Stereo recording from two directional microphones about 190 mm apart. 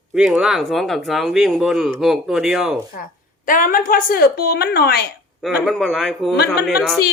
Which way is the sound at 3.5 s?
45° left (ahead or behind).